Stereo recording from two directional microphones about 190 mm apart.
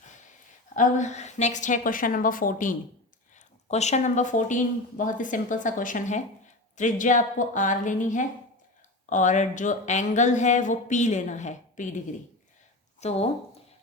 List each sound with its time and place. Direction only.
0.8 s a woman's voice: 40° left (ahead or behind)